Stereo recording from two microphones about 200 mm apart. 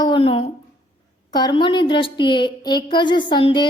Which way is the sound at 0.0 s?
25° left (ahead or behind).